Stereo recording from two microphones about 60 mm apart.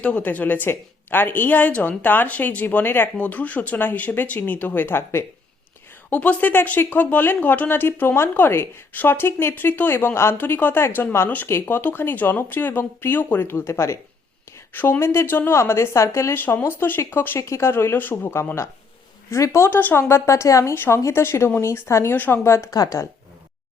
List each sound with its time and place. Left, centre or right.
0.0 s a woman's voice: left
6.1 s a woman's voice: left
14.7 s a woman's voice: left
16.3 s a woman's voice: left
17.3 s a woman's voice: left
20.7 s a woman's voice: left
21.0 s a woman's voice: left
22.1 s a woman's voice: left
22.4 s a woman's voice: left
22.7 s speech: left